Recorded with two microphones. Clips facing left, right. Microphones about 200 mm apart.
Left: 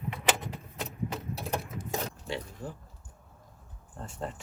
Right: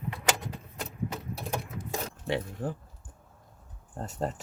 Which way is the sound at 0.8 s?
Centre (ahead or behind).